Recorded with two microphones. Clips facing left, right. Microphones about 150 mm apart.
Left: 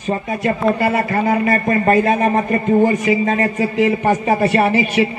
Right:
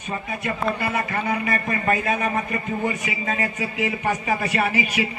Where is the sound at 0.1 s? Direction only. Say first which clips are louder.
Left 9 dB; 40° left (ahead or behind).